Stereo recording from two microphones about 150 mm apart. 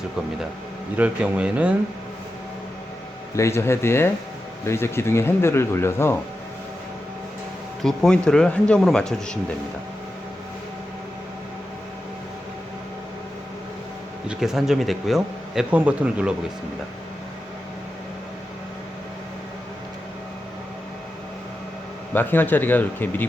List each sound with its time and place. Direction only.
0.9 s speech: 10° right (ahead or behind)
3.3 s speech: 20° left (ahead or behind)
7.9 s speech: 5° left (ahead or behind)
14.3 s speech: 5° right (ahead or behind)
22.1 s speech: 10° left (ahead or behind)